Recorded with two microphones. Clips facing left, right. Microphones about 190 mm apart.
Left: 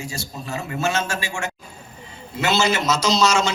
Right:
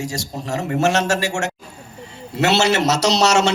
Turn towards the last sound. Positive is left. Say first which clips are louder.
# right 3 dB
turn(degrees=-70)  # may be behind; listen again after turning